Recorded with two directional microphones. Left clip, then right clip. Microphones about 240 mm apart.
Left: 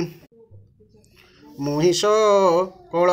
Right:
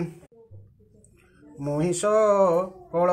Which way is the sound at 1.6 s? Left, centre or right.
Left.